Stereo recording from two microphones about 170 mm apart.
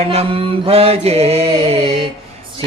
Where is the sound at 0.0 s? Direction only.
35° right (ahead or behind).